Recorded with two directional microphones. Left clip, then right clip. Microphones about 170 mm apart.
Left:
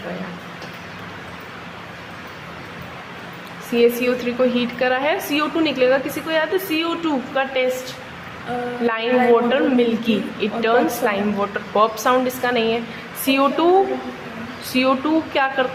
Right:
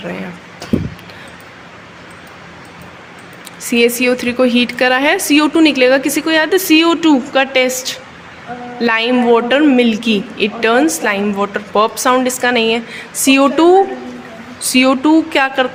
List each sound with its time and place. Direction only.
3.7 s a woman's voice: 45° right (ahead or behind)